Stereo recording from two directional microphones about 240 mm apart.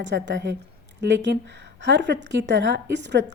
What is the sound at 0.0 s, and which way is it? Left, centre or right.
A woman's voice, right.